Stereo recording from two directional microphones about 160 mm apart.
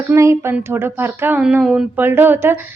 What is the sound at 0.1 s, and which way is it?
A woman's voice, 15° right (ahead or behind).